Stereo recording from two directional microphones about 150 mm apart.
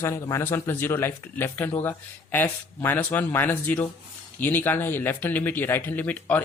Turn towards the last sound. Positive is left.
turn(degrees=10)  # may be behind; listen again after turning